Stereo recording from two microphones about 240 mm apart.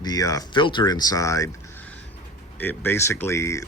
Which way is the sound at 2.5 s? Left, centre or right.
Centre.